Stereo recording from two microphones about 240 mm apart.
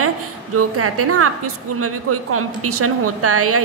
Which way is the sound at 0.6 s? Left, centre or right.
Right.